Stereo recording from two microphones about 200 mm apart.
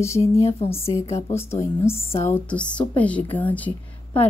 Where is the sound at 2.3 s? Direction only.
5° left (ahead or behind).